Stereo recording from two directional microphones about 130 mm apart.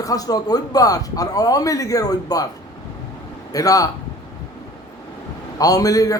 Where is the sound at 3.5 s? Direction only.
25° left (ahead or behind).